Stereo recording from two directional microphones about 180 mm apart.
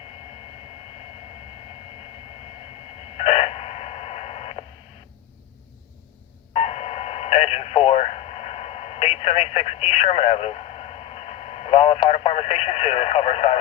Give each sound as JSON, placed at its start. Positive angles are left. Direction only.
{"t": 3.2, "sound": "radio", "side_deg": 35}
{"t": 6.5, "sound": "radio", "side_deg": 35}